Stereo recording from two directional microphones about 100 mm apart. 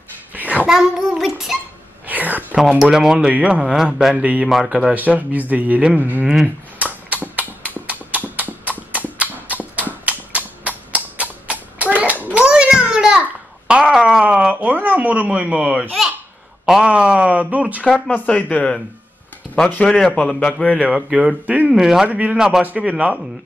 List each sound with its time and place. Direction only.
0.3 s a sound: 15° right (ahead or behind)
0.7 s a child's voice: 5° right (ahead or behind)
2.0 s whispering: 15° right (ahead or behind)
2.8 s a man's voice: 5° right (ahead or behind)
6.8 s a sound: 15° right (ahead or behind)
16.6 s a man's voice: 10° right (ahead or behind)
18.1 s a man's voice: 15° left (ahead or behind)
20.7 s a man's voice: 10° right (ahead or behind)